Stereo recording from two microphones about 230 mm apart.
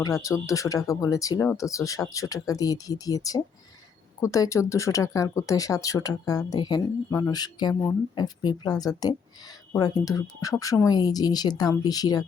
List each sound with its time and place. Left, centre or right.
0.0 s speech: centre